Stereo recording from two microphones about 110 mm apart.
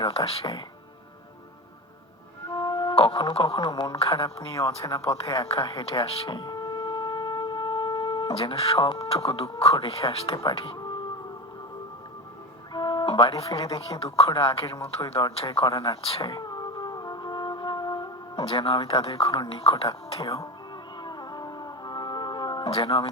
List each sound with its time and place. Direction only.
0.3 s speech: 55° left (ahead or behind)
2.5 s music: 40° left (ahead or behind)
2.9 s speech: 55° left (ahead or behind)
4.5 s speech: 30° left (ahead or behind)
5.4 s speech: 50° left (ahead or behind)
10.8 s music: 40° left (ahead or behind)
12.7 s speech: 40° left (ahead or behind)
16.2 s music: 40° left (ahead or behind)
18.4 s speech: 55° left (ahead or behind)
21.0 s music: 40° left (ahead or behind)
22.7 s speech: 55° left (ahead or behind)